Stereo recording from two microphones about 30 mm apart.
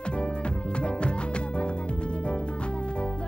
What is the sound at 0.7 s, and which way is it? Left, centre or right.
Music, left.